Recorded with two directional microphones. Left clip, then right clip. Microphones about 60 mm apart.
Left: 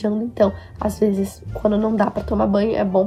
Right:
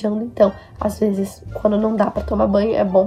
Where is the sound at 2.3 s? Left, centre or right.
Left.